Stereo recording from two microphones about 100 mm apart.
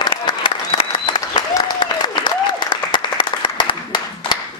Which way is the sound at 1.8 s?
50° left (ahead or behind).